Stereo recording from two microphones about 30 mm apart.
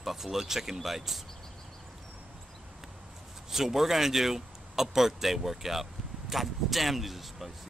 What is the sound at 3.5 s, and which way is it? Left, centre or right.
Speech, centre.